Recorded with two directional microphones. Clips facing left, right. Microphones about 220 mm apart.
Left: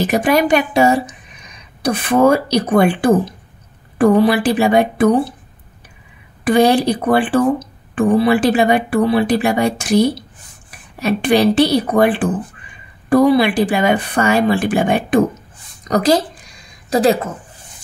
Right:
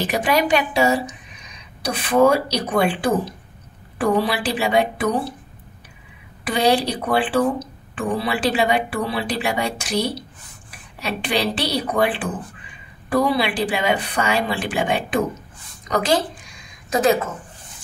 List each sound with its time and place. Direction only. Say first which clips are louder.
0.0 s speech: left 5 dB; 50° left (ahead or behind)
6.4 s a woman's voice: left 6 dB; 50° left (ahead or behind)